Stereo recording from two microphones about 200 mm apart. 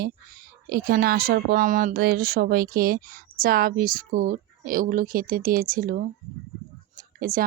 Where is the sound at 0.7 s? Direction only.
50° right (ahead or behind).